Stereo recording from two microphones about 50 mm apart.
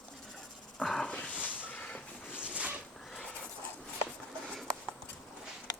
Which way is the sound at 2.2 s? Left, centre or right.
Right.